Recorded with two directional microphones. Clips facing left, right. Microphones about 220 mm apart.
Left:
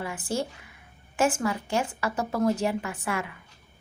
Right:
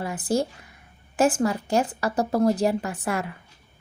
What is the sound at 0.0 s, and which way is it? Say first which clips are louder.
A woman's voice: right 5 dB; 40° right (ahead or behind).